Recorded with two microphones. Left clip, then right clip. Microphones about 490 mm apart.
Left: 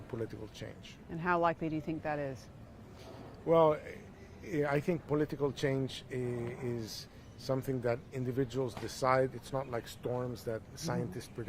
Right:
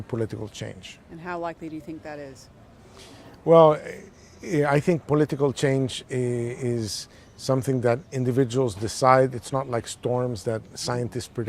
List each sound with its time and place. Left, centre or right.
0.1 s speech: right
1.2 s speech: left
3.4 s speech: right